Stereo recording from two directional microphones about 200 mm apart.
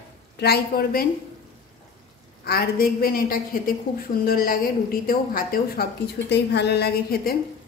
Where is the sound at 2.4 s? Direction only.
50° left (ahead or behind).